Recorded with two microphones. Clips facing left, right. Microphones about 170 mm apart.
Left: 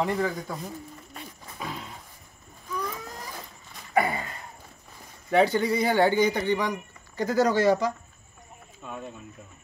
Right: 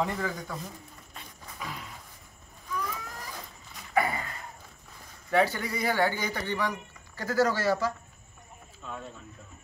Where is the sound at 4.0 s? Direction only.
25° left (ahead or behind).